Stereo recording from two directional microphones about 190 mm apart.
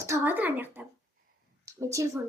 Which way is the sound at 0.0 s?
15° right (ahead or behind).